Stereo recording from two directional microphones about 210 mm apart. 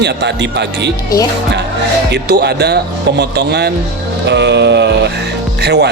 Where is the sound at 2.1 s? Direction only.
50° right (ahead or behind).